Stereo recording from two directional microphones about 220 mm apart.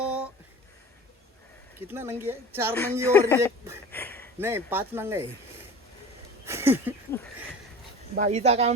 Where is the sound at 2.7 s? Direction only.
10° left (ahead or behind).